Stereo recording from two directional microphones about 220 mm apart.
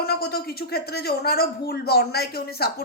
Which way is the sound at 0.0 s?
45° left (ahead or behind).